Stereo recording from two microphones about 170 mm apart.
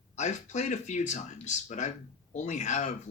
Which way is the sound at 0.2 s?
45° left (ahead or behind).